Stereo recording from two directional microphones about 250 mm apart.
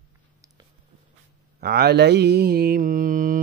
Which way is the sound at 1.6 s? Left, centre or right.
Right.